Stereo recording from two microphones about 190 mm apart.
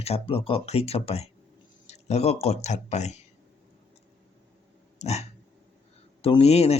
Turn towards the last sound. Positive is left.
turn(degrees=35)  # may be behind; listen again after turning